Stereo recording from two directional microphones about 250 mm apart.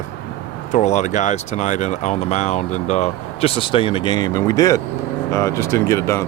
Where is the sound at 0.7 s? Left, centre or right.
Left.